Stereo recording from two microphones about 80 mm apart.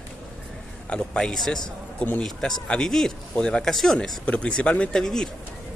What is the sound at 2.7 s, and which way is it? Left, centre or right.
Speech, centre.